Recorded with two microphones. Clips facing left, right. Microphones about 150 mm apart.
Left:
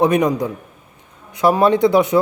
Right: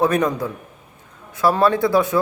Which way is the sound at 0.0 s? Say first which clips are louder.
Left 3 dB; 15° left (ahead or behind).